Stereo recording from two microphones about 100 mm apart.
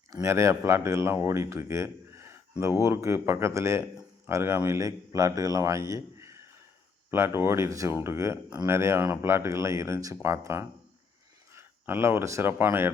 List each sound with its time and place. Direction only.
0.1 s a man's voice: 30° right (ahead or behind)